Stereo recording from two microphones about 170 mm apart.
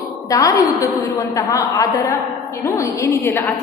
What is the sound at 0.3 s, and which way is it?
A woman's voice, 20° left (ahead or behind).